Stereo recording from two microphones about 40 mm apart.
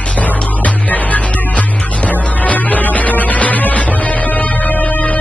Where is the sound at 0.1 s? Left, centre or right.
Left.